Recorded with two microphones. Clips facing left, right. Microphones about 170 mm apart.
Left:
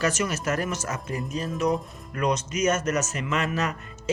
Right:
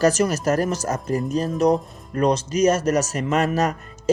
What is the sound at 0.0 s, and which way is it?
Speech, 35° right (ahead or behind).